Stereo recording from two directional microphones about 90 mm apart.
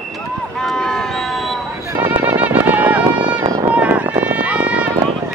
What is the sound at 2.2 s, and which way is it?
Music, 20° right (ahead or behind).